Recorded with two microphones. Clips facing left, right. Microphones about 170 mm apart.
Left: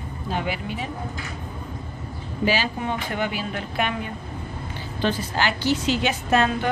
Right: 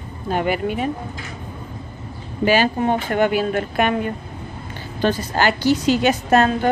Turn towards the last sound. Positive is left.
turn(degrees=-45)  # may be behind; listen again after turning